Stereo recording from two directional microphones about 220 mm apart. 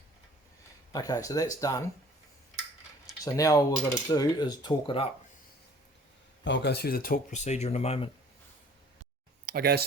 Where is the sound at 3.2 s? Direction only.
15° left (ahead or behind).